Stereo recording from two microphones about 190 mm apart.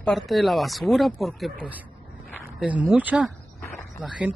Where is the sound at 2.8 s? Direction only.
10° right (ahead or behind).